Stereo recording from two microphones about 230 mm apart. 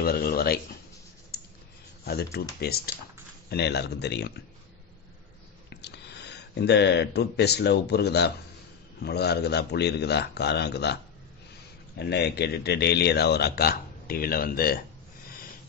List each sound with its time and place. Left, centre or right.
0.0 s speech: left
1.3 s a sound: left
2.6 s speech: left
5.7 s speech: left
12.0 s speech: left